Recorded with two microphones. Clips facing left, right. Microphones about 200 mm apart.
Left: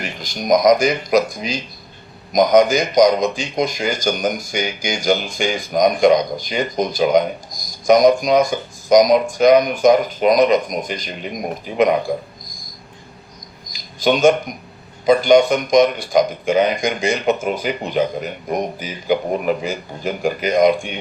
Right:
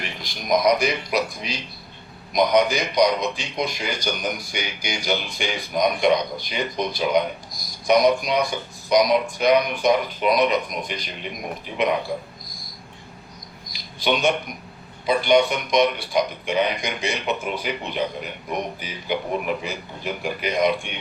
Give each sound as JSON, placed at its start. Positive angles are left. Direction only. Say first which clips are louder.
{"t": 0.0, "sound": "a man's voice", "louder": "left 7 dB", "side_deg": 45}
{"t": 13.7, "sound": "a sound", "louder": "left 6 dB", "side_deg": 45}
{"t": 15.0, "sound": "a man's voice", "louder": "left 6 dB", "side_deg": 45}